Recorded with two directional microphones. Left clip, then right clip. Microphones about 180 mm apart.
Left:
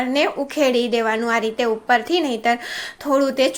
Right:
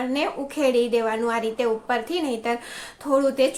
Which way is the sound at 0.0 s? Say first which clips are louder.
Left 6 dB; 35° left (ahead or behind).